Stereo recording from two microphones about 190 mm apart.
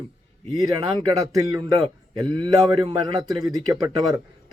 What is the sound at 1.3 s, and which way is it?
A man's voice, 20° right (ahead or behind).